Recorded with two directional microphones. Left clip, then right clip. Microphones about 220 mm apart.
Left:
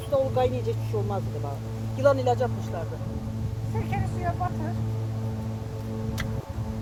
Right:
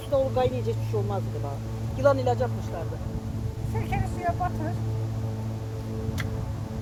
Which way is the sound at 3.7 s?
45° right (ahead or behind).